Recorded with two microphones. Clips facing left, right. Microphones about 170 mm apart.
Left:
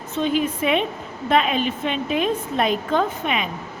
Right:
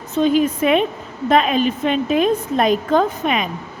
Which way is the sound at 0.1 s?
40° right (ahead or behind).